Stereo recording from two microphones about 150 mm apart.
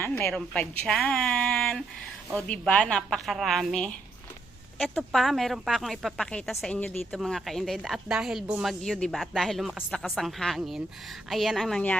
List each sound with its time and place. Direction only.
0.0 s a woman's voice: 10° left (ahead or behind)
4.9 s speech: centre (ahead or behind)